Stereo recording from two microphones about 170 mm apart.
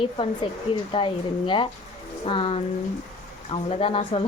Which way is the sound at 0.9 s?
30° left (ahead or behind).